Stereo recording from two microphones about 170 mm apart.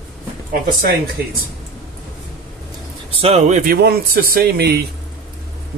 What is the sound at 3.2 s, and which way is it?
Speech, 35° right (ahead or behind).